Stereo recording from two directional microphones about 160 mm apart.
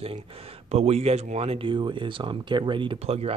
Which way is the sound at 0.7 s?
40° right (ahead or behind).